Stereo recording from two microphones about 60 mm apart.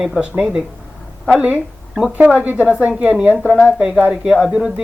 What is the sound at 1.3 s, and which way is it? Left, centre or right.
Speech, right.